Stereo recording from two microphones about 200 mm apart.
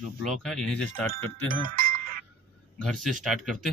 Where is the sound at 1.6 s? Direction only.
45° right (ahead or behind).